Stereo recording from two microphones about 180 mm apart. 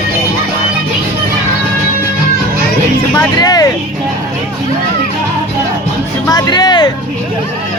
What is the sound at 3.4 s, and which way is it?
Vehicle, 20° left (ahead or behind).